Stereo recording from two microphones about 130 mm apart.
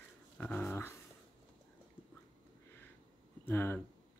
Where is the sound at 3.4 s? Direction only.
15° left (ahead or behind).